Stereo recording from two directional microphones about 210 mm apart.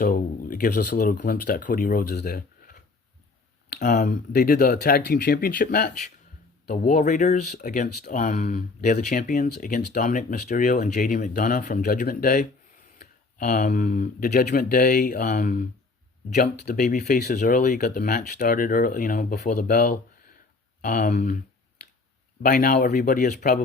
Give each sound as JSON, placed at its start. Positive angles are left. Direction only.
{"t": 0.0, "sound": "speech", "side_deg": 40}
{"t": 22.4, "sound": "speech", "side_deg": 40}